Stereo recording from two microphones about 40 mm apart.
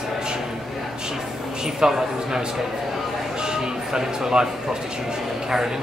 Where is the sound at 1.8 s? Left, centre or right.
Centre.